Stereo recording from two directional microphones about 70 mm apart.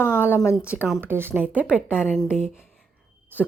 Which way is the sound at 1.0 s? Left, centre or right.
Right.